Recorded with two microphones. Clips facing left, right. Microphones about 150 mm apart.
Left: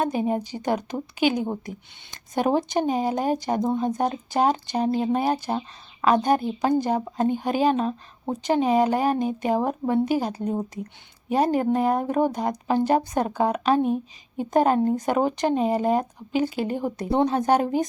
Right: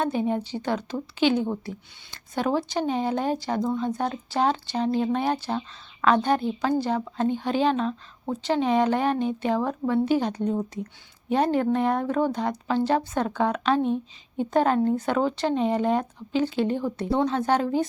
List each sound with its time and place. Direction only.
0.0 s a woman's voice: 10° left (ahead or behind)